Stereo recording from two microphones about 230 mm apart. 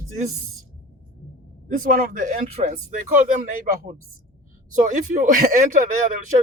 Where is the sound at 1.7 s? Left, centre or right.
Right.